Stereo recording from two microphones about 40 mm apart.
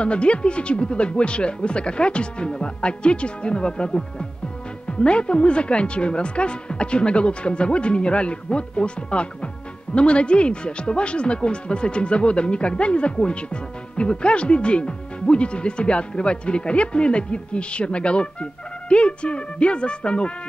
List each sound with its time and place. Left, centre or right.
0.0 s speech: left